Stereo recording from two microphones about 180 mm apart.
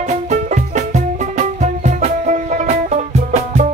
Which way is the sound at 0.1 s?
40° right (ahead or behind).